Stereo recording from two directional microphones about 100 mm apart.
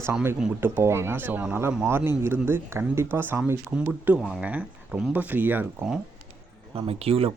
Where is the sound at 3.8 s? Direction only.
15° right (ahead or behind).